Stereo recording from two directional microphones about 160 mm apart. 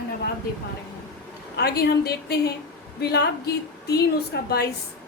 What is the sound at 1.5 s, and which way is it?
A woman's voice, 85° left.